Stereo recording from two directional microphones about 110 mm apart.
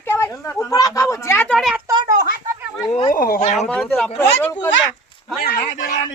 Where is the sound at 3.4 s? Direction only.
90° left.